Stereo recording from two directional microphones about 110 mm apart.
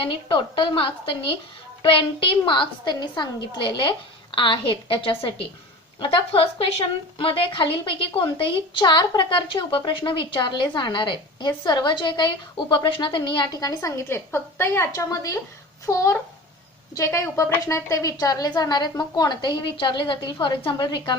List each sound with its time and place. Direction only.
0.0 s a woman's voice: 50° left (ahead or behind)